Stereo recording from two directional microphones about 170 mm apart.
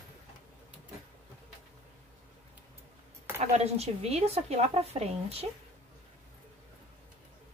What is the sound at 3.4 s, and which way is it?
A woman's voice, 35° right (ahead or behind).